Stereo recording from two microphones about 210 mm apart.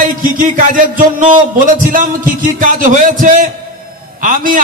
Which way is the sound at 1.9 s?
40° right (ahead or behind).